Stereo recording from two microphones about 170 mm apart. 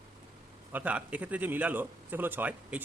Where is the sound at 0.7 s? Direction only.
10° right (ahead or behind).